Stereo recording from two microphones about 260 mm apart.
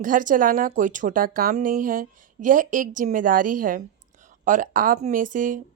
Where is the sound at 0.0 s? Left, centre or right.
Right.